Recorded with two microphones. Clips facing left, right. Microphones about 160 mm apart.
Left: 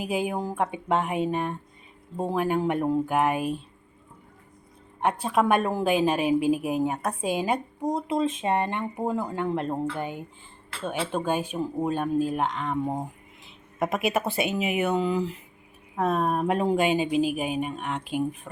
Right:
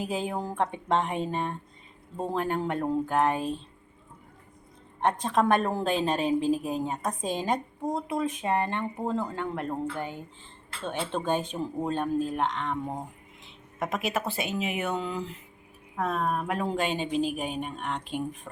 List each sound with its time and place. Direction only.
0.0 s a woman's voice: 15° left (ahead or behind)
4.9 s a woman's voice: 10° left (ahead or behind)
12.8 s speech: 20° left (ahead or behind)
16.0 s a woman's voice: 25° left (ahead or behind); by 18.3 s 5° left (ahead or behind)